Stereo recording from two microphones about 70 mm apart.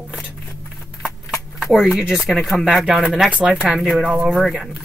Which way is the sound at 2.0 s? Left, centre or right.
Centre.